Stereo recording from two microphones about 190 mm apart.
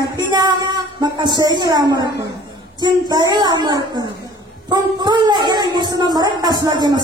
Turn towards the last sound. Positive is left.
turn(degrees=-20)  # may be behind; listen again after turning